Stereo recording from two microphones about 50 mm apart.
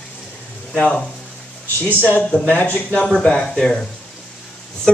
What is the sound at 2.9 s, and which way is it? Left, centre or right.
Speech, centre.